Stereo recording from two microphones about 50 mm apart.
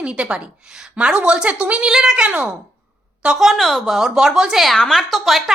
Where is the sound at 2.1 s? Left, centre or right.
Right.